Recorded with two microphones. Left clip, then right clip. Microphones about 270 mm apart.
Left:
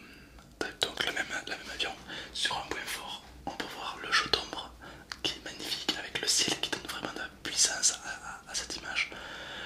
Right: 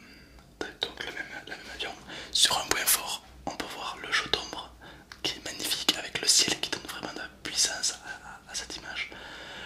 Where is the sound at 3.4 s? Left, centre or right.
Centre.